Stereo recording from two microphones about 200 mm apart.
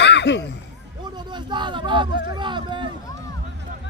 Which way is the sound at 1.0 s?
20° right (ahead or behind).